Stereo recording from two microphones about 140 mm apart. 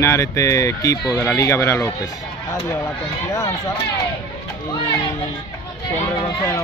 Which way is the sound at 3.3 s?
25° left (ahead or behind).